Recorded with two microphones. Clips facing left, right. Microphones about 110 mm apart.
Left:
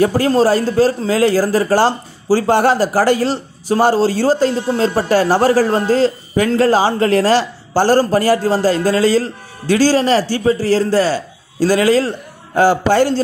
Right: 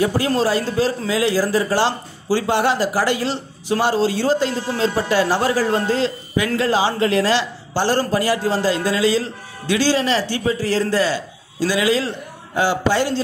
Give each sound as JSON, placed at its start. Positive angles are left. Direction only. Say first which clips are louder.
{"t": 0.4, "sound": "speech", "louder": "left 8 dB", "side_deg": 40}